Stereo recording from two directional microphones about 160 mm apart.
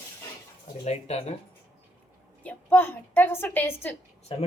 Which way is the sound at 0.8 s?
40° left (ahead or behind).